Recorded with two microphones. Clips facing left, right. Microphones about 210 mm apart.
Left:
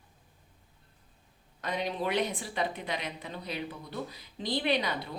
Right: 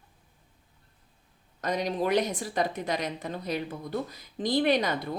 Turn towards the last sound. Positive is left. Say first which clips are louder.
# right 5 dB
turn(degrees=-45)  # may be behind; listen again after turning